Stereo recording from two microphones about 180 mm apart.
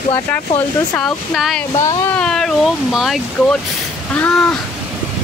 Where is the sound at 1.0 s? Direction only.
Centre (ahead or behind).